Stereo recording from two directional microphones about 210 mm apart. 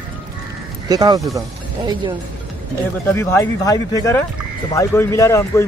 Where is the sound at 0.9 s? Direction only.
20° right (ahead or behind).